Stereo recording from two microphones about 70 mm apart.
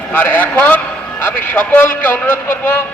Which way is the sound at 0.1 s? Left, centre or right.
Left.